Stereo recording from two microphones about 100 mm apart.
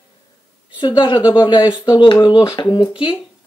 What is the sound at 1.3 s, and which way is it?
Speech, 45° left (ahead or behind).